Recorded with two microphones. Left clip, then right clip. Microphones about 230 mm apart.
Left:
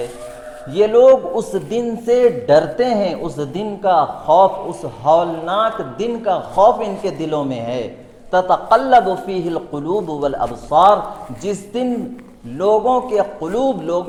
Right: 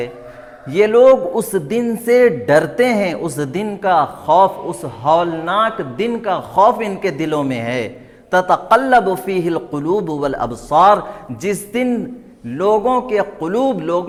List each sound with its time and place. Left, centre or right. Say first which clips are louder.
0.7 s a man's voice: even; right